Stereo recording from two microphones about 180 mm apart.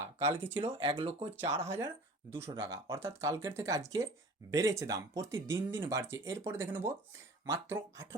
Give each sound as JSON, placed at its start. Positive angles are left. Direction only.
{"t": 0.0, "sound": "speech", "side_deg": -15}
{"t": 0.6, "sound": "speech", "side_deg": -30}
{"t": 1.4, "sound": "speech", "side_deg": -15}